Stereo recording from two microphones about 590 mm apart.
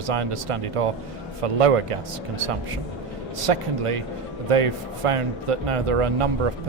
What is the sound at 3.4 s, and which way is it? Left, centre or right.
A man's voice, right.